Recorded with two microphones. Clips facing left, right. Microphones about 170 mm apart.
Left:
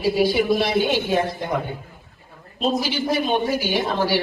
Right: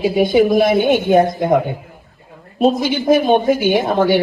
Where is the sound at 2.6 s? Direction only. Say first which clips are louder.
Right 7 dB; 55° right (ahead or behind).